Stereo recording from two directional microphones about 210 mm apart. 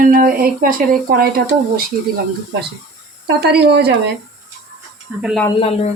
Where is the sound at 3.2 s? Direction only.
50° right (ahead or behind).